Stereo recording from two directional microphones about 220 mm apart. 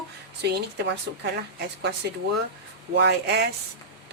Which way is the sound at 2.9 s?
50° right (ahead or behind).